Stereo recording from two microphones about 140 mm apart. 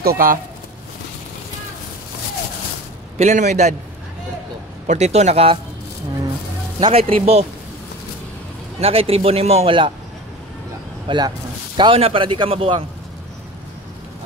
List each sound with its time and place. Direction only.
0.0 s speech: 90° right
3.2 s a man's voice: 60° right (ahead or behind)
4.8 s a man's voice: 55° right (ahead or behind)
6.8 s a man's voice: 45° right (ahead or behind)
8.7 s a man's voice: 45° right (ahead or behind)
11.1 s a man's voice: 35° right (ahead or behind)